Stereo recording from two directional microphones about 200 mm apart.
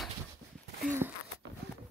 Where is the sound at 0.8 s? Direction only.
10° right (ahead or behind).